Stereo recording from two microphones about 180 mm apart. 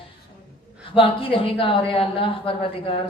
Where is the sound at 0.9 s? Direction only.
30° left (ahead or behind).